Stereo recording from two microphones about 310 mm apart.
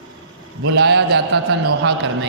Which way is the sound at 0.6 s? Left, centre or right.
Right.